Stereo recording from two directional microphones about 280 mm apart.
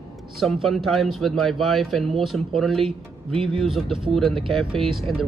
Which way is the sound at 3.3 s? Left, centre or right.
Centre.